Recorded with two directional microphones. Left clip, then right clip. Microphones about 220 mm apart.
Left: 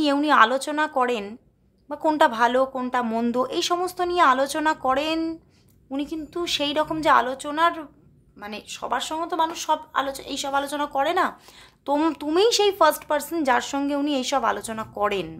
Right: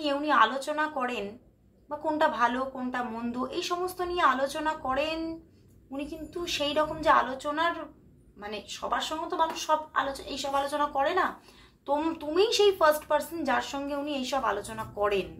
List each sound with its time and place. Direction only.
0.0 s speech: 45° left (ahead or behind)